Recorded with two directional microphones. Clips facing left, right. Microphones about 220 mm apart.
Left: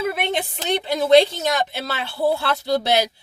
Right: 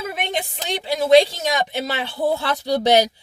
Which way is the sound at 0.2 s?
10° right (ahead or behind).